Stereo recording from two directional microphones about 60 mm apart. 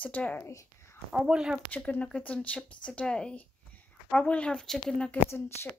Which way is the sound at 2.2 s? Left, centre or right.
Centre.